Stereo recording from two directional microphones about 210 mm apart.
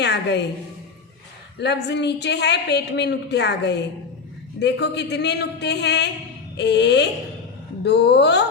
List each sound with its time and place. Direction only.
0.0 s a woman's voice: 55° left (ahead or behind)
1.5 s a woman's voice: 55° left (ahead or behind)